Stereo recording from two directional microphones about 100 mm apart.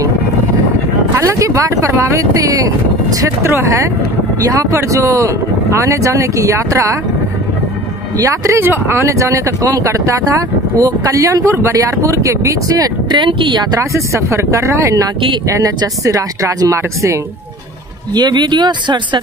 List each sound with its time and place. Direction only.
1.2 s speech: 30° right (ahead or behind)
8.2 s speech: 30° right (ahead or behind); by 13.7 s 50° right (ahead or behind)
13.7 s speech: 30° right (ahead or behind)
18.1 s speech: 45° right (ahead or behind)